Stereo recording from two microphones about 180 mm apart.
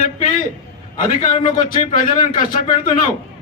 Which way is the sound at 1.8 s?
45° left (ahead or behind).